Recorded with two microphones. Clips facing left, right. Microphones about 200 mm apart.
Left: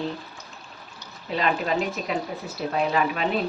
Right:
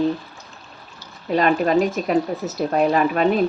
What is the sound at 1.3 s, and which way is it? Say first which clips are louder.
A woman's voice: right 7 dB; 50° right (ahead or behind).